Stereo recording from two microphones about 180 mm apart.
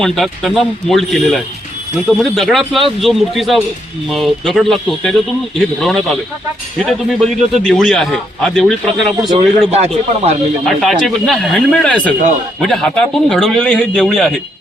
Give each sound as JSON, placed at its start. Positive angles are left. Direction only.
{"t": 0.0, "sound": "a man's voice", "side_deg": 0}
{"t": 9.7, "sound": "speech", "side_deg": -35}
{"t": 10.7, "sound": "a man's voice", "side_deg": 0}